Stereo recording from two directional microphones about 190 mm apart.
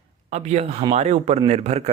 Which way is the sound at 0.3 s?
35° right (ahead or behind).